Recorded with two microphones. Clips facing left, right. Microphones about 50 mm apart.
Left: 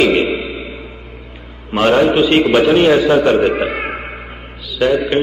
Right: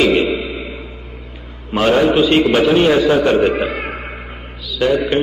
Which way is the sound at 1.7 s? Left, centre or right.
Centre.